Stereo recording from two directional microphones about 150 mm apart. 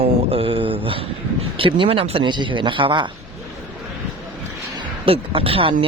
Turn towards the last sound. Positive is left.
turn(degrees=-40)  # may be behind; listen again after turning